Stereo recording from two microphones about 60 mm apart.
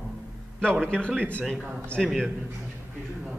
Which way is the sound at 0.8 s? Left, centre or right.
Centre.